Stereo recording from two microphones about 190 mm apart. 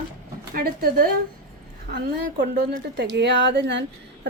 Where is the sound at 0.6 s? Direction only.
50° right (ahead or behind).